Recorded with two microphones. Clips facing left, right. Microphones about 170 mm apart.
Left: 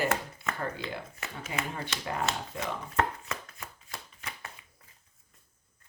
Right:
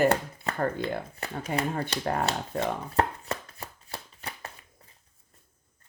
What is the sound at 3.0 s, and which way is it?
Chopping, 35° right (ahead or behind).